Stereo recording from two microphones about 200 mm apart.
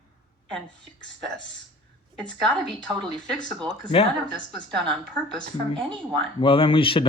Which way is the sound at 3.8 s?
30° left (ahead or behind).